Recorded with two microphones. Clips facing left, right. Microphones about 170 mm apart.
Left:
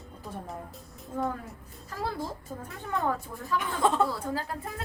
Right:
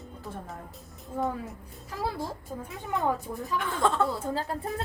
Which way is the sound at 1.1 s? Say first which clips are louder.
Right 1 dB; centre (ahead or behind).